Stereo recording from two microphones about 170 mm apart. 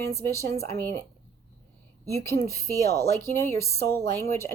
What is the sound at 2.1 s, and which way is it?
Speech, 15° left (ahead or behind).